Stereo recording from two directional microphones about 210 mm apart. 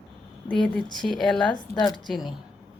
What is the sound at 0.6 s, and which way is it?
Speech, 5° left (ahead or behind).